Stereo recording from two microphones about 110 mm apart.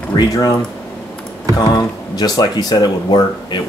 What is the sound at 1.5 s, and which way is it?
Speech, 30° left (ahead or behind).